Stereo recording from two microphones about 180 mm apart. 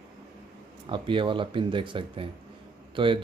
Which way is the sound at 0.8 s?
30° right (ahead or behind).